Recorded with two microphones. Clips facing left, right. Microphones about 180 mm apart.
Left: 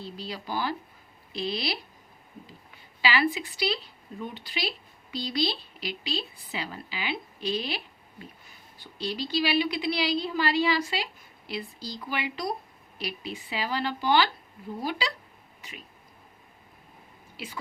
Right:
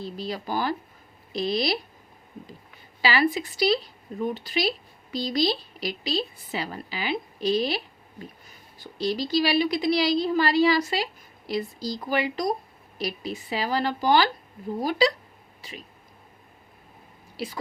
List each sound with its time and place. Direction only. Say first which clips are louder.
0.2 s speech: right 4 dB; 45° right (ahead or behind)
3.0 s a woman's voice: right 3 dB; 40° right (ahead or behind)
17.3 s speech: right 7 dB; 35° right (ahead or behind)